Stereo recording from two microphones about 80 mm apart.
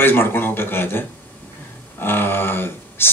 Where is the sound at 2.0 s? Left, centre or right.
Left.